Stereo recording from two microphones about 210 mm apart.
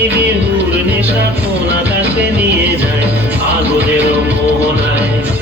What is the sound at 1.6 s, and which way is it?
Music, 10° right (ahead or behind).